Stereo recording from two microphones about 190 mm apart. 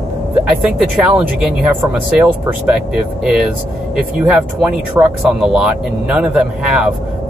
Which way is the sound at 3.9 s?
5° right (ahead or behind).